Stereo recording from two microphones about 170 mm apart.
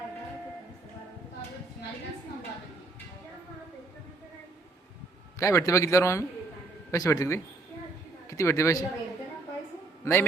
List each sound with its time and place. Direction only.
5.4 s a man's voice: 20° left (ahead or behind)
10.0 s a man's voice: 15° left (ahead or behind)